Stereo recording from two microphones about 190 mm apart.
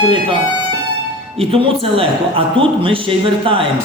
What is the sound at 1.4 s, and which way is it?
A man's voice, 30° right (ahead or behind).